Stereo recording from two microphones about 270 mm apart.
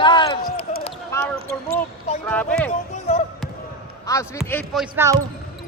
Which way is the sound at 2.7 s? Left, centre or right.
Left.